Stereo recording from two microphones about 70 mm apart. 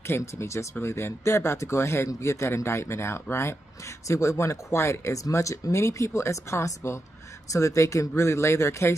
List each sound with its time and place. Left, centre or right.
0.0 s speech: left